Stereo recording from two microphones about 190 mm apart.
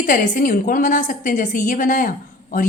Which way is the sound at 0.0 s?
45° left (ahead or behind).